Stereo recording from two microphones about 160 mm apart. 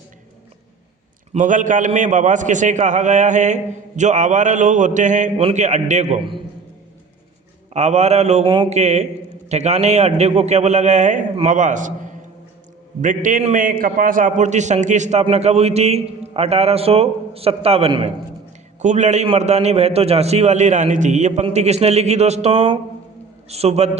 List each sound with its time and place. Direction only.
1.3 s a man's voice: 55° right (ahead or behind)
6.1 s a man's voice: 35° right (ahead or behind)
7.7 s a man's voice: 45° right (ahead or behind)
8.4 s a man's voice: 30° right (ahead or behind)
8.7 s a man's voice: 45° right (ahead or behind)